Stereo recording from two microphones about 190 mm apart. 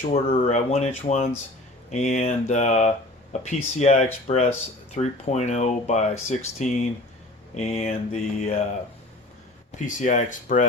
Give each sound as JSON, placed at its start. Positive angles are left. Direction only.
{"t": 0.1, "sound": "speech", "side_deg": 35}
{"t": 9.7, "sound": "speech", "side_deg": 40}